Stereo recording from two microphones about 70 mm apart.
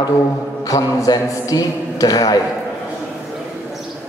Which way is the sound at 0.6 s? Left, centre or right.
Left.